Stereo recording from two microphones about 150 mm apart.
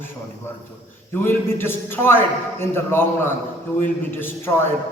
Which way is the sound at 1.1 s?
15° left (ahead or behind).